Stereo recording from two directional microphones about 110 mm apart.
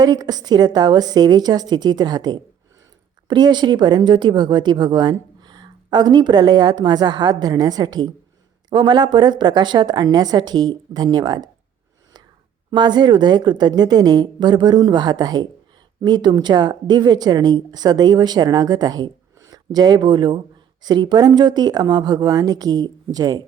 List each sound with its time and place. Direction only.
0.0 s a woman's voice: 35° right (ahead or behind)
12.7 s speech: 40° right (ahead or behind)